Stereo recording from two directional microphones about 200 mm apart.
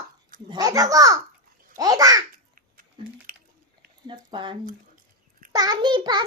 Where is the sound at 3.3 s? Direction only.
45° right (ahead or behind).